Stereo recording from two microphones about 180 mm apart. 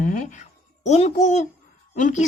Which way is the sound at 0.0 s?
45° left (ahead or behind).